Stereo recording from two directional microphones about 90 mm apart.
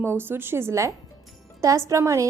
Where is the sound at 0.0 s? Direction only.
25° right (ahead or behind).